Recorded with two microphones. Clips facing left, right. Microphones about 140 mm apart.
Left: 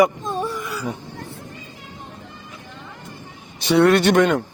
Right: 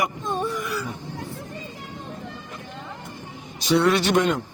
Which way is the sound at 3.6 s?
60° left (ahead or behind).